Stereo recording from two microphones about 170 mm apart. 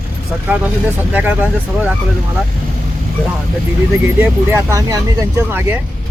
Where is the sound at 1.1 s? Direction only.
10° right (ahead or behind).